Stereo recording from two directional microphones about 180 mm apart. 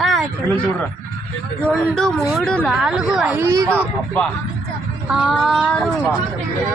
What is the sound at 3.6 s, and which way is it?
Speech, 5° left (ahead or behind).